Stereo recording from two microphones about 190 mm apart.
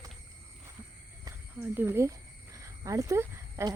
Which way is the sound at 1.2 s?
10° right (ahead or behind).